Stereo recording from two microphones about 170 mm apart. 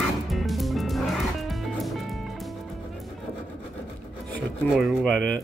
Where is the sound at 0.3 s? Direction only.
Centre (ahead or behind).